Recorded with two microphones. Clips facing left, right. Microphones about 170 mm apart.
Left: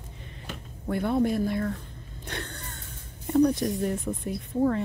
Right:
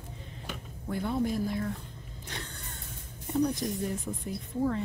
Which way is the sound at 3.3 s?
65° left (ahead or behind).